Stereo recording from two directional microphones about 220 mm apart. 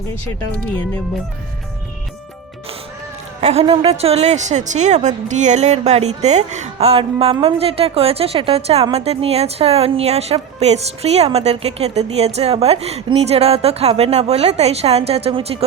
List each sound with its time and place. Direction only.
3.4 s a woman's voice: 25° right (ahead or behind)